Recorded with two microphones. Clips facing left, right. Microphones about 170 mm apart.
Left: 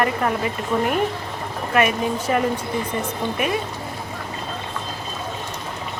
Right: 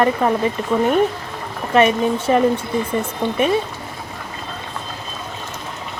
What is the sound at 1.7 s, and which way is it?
Speech, 30° right (ahead or behind).